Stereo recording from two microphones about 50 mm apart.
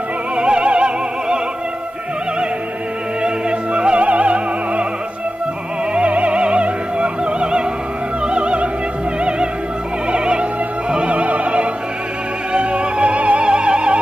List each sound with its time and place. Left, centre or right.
0.4 s opera: right
3.4 s opera: right
5.9 s music: right
10.1 s music: centre
10.9 s opera: right
12.5 s music: right